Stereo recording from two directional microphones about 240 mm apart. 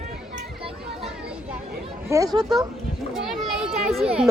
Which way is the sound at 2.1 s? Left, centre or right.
Centre.